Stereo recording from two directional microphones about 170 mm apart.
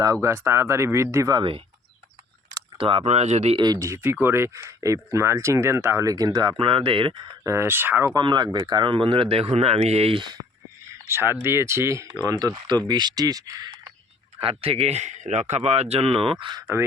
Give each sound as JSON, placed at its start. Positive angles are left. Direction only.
{"t": 0.0, "sound": "speech", "side_deg": -20}
{"t": 3.6, "sound": "speech", "side_deg": -20}
{"t": 7.5, "sound": "speech", "side_deg": -15}
{"t": 8.1, "sound": "speech", "side_deg": -25}
{"t": 10.9, "sound": "a sound", "side_deg": -15}
{"t": 11.4, "sound": "speech", "side_deg": -15}
{"t": 14.3, "sound": "speech", "side_deg": -35}